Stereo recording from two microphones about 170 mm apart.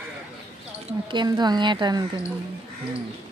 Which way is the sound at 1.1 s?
25° right (ahead or behind).